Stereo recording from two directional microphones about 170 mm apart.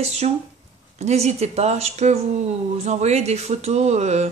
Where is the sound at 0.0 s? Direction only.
40° right (ahead or behind).